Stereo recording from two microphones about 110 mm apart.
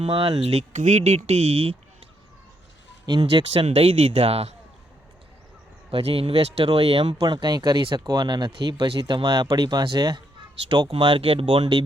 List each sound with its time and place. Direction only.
0.0 s speech: 50° right (ahead or behind)
0.7 s speech: 90° right; by 1.7 s 65° right (ahead or behind)
3.1 s speech: 45° right (ahead or behind)
3.7 s speech: 60° right (ahead or behind)
5.9 s speech: 65° right (ahead or behind); by 11.8 s 50° right (ahead or behind)